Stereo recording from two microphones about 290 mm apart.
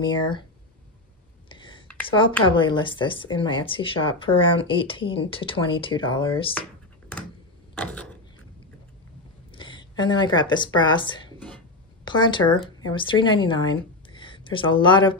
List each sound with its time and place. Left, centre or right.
0.0 s speech: centre
1.5 s a sound: centre
2.0 s speech: centre
7.7 s mechanisms: centre
9.5 s speech: centre